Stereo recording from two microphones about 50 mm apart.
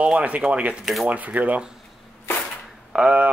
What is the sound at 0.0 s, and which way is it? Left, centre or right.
Speech, right.